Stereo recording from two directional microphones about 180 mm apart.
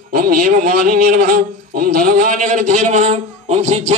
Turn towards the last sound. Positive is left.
turn(degrees=-35)  # may be behind; listen again after turning